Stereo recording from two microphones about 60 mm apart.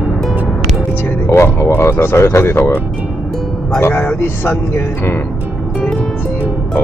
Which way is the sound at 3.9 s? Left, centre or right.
Centre.